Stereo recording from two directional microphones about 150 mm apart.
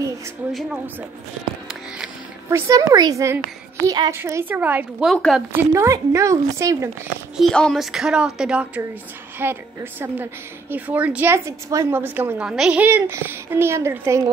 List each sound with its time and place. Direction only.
2.5 s a woman's voice: 20° right (ahead or behind)
5.0 s a woman's voice: centre (ahead or behind)
5.5 s a woman's voice: 15° right (ahead or behind)
7.3 s a woman's voice: 5° left (ahead or behind); by 14.3 s 20° right (ahead or behind)